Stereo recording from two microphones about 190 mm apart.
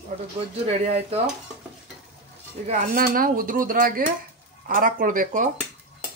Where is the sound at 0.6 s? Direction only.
35° right (ahead or behind).